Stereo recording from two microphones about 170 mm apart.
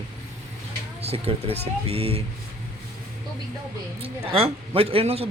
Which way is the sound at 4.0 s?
35° right (ahead or behind).